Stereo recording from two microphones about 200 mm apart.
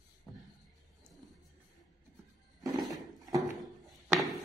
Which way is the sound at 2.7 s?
Centre (ahead or behind).